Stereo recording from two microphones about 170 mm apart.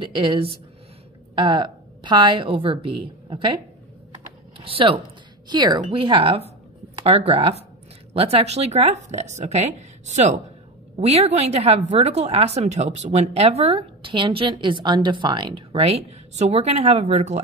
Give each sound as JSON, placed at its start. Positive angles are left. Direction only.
{"t": 0.0, "sound": "a woman's voice", "side_deg": -30}
{"t": 4.6, "sound": "a woman's voice", "side_deg": -30}